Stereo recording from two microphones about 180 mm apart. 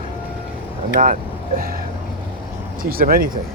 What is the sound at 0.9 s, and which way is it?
Vehicle, 45° right (ahead or behind).